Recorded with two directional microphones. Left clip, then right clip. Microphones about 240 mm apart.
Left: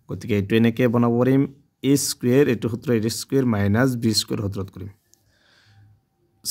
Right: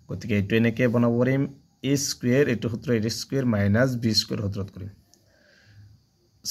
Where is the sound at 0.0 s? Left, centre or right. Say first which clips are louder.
Left 4 dB; left.